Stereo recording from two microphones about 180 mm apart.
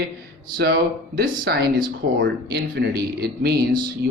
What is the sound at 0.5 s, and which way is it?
Speech, 65° right (ahead or behind).